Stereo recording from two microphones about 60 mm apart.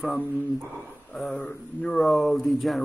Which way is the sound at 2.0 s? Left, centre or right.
Centre.